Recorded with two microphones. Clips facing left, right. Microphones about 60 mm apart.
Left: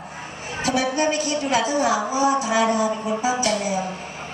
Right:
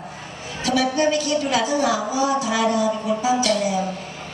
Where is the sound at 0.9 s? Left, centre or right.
Left.